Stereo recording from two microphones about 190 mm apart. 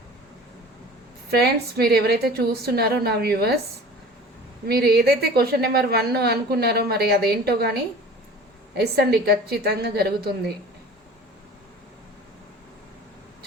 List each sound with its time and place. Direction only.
1.3 s a woman's voice: 55° right (ahead or behind)
4.7 s a woman's voice: 55° right (ahead or behind)
8.8 s a woman's voice: 55° right (ahead or behind)